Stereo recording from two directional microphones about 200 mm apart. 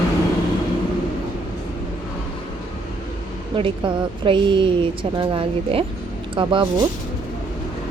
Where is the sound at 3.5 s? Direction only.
25° right (ahead or behind).